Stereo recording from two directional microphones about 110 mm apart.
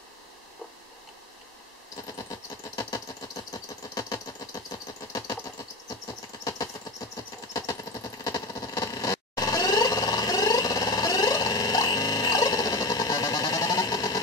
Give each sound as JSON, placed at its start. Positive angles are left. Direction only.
{"t": 2.8, "sound": "engine", "side_deg": 35}
{"t": 7.5, "sound": "vehicle", "side_deg": 30}